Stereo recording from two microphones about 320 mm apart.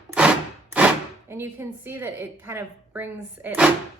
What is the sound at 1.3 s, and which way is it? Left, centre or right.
A woman's voice, centre.